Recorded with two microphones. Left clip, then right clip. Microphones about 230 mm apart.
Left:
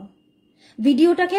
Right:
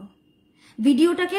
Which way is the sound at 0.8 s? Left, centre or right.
Centre.